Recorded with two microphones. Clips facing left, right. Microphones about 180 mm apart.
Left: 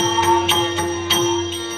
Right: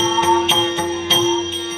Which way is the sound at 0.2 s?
20° right (ahead or behind).